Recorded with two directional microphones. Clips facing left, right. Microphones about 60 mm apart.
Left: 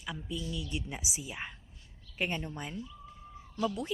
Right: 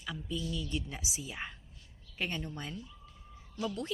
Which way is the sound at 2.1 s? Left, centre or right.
Centre.